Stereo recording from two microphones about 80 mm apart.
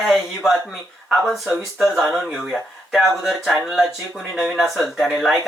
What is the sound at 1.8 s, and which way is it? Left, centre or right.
Speech, centre.